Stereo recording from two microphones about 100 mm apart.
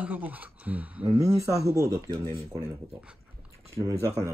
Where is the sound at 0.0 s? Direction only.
15° right (ahead or behind).